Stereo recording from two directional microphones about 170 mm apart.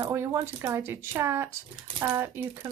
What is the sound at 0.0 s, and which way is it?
A woman's voice, 15° right (ahead or behind).